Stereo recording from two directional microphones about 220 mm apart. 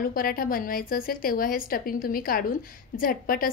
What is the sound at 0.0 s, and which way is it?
A woman's voice, 40° left (ahead or behind).